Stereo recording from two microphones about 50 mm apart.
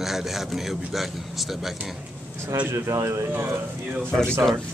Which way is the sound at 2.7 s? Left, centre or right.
Right.